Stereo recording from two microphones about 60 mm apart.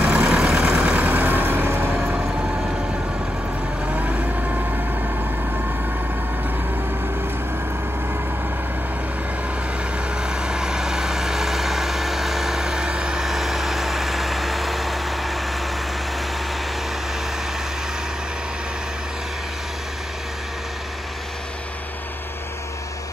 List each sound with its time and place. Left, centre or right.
0.0 s vehicle: right
3.8 s vehicle: right
10.2 s vehicle: centre